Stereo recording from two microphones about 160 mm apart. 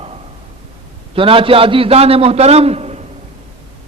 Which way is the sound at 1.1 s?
35° right (ahead or behind).